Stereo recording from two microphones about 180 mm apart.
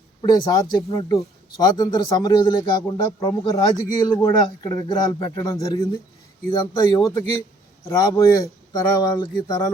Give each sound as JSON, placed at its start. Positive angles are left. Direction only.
{"t": 0.2, "sound": "a man's voice", "side_deg": 20}